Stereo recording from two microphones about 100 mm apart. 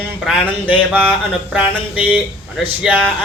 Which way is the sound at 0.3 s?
15° right (ahead or behind).